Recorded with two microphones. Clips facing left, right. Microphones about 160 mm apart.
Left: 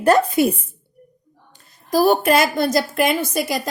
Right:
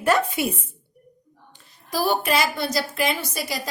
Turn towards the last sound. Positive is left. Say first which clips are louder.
# left 6 dB
turn(degrees=50)  # may be behind; listen again after turning